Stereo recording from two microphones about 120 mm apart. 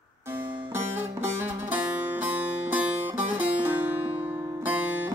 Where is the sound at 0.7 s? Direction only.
20° right (ahead or behind).